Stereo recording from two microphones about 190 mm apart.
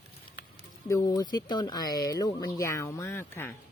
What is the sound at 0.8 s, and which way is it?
Speech, 20° left (ahead or behind).